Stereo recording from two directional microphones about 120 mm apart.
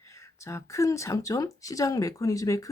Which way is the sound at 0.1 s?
25° left (ahead or behind).